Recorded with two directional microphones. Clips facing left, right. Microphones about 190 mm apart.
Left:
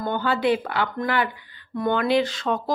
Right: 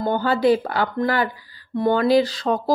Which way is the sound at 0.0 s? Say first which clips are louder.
Right 4 dB; 35° right (ahead or behind).